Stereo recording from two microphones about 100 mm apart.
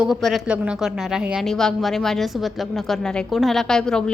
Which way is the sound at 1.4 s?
5° left (ahead or behind).